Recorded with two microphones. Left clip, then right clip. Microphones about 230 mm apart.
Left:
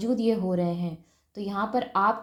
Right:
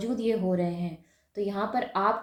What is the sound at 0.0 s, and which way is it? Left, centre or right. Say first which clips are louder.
A woman's voice: left 2 dB; left.